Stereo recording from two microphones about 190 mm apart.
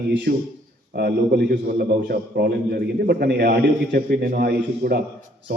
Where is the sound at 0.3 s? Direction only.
50° right (ahead or behind).